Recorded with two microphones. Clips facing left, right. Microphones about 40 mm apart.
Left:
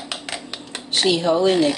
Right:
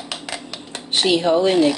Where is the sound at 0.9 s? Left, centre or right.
Right.